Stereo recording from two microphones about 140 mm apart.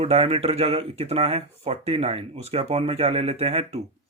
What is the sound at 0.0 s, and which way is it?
Speech, 45° right (ahead or behind).